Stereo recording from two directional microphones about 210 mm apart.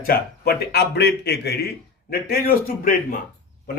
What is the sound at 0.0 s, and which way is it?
Speech, 45° left (ahead or behind).